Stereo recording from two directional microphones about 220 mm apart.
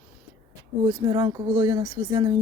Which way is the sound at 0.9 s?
20° right (ahead or behind).